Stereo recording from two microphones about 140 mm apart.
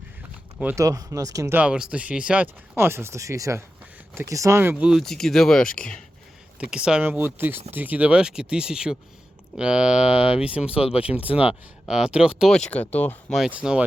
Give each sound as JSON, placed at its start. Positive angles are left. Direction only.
{"t": 0.8, "sound": "speech", "side_deg": -25}
{"t": 4.7, "sound": "speech", "side_deg": -5}
{"t": 10.7, "sound": "speech", "side_deg": 45}
{"t": 11.0, "sound": "speech", "side_deg": -10}
{"t": 13.3, "sound": "speech", "side_deg": -5}